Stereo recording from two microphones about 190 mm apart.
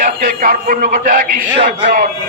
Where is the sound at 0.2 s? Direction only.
45° right (ahead or behind).